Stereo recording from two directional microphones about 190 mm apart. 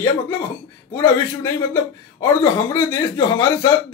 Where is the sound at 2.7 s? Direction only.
20° left (ahead or behind).